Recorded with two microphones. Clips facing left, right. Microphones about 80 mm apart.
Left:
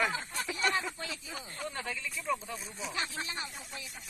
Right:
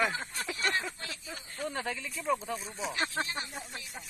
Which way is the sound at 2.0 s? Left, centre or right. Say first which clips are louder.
Right 3 dB; right.